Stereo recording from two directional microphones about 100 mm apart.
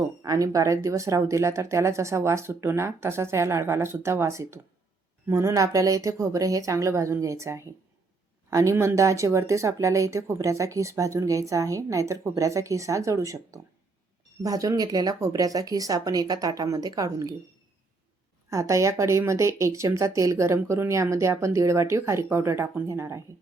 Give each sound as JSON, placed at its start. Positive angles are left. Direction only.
{"t": 0.2, "sound": "speech", "side_deg": -35}
{"t": 18.5, "sound": "speech", "side_deg": -30}